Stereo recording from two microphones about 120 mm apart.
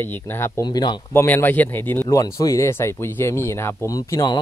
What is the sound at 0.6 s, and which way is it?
Speech, 35° left (ahead or behind).